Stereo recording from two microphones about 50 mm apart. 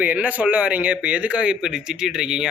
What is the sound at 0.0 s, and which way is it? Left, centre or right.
Speech, right.